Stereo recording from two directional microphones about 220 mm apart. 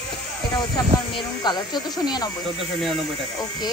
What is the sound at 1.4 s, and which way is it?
Speech, 20° left (ahead or behind).